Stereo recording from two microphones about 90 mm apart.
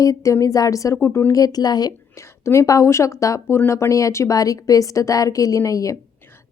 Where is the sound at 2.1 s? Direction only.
30° left (ahead or behind).